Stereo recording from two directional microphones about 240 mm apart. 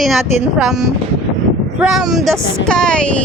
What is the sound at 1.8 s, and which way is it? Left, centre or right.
Speech, centre.